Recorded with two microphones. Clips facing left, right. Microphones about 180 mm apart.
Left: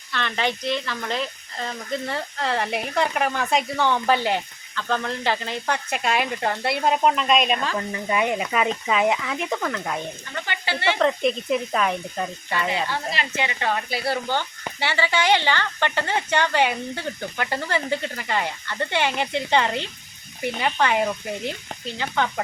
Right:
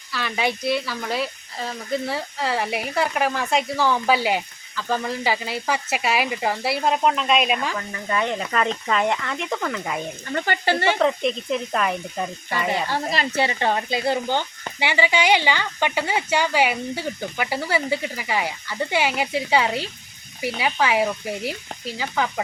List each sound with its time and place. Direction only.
0.1 s speech: 5° right (ahead or behind)
7.8 s speech: 20° left (ahead or behind); by 10.0 s centre (ahead or behind)
10.3 s speech: 45° right (ahead or behind)
11.0 s speech: centre (ahead or behind)
12.7 s speech: 40° right (ahead or behind); by 22.3 s 5° right (ahead or behind)